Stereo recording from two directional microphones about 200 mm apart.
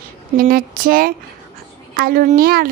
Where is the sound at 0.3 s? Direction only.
45° right (ahead or behind).